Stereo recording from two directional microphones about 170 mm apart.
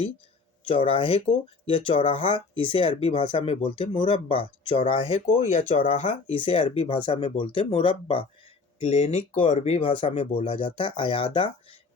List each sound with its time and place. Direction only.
0.7 s speech: 35° left (ahead or behind)
8.8 s speech: 40° left (ahead or behind)